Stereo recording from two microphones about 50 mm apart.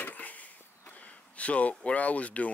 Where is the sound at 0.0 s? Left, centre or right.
Left.